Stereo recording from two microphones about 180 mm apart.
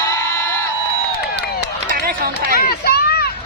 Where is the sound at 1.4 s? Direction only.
70° left (ahead or behind).